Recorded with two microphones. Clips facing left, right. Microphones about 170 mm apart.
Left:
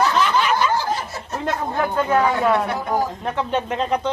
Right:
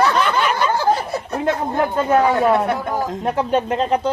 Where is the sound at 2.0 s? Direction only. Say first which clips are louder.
Right 4 dB; 20° right (ahead or behind).